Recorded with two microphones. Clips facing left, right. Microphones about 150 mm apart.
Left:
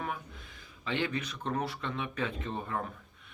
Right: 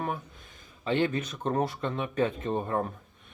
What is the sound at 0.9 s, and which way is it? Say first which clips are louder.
Speech: right 6 dB; 45° right (ahead or behind).